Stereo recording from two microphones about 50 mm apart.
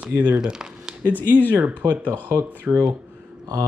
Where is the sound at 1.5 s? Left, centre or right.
Right.